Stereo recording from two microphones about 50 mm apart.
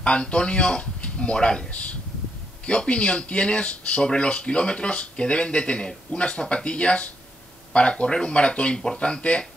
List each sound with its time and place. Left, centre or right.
0.0 s speech: left